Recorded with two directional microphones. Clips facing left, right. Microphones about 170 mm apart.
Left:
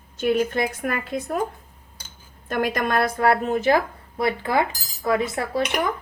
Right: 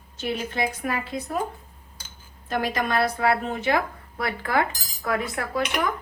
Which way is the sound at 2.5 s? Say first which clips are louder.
Left 2 dB; 50° left (ahead or behind).